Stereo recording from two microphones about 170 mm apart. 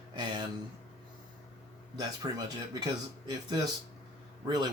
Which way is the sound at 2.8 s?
25° right (ahead or behind).